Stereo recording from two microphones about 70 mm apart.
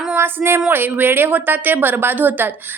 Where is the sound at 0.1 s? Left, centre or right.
Right.